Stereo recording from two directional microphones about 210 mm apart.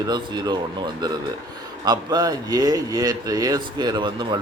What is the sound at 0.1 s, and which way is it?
Speech, 20° right (ahead or behind).